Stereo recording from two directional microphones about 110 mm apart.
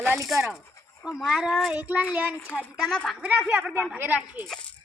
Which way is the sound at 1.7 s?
15° right (ahead or behind).